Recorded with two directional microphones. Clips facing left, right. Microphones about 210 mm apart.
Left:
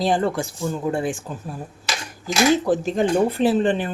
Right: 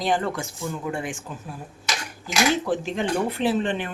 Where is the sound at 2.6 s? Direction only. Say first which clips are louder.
Left 5 dB; 40° left (ahead or behind).